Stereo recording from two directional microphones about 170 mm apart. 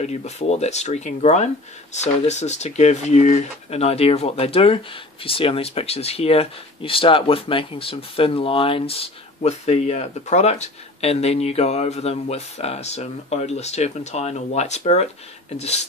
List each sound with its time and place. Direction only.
0.0 s speech: 40° left (ahead or behind)